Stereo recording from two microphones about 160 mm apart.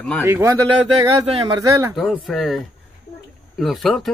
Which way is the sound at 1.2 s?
30° right (ahead or behind).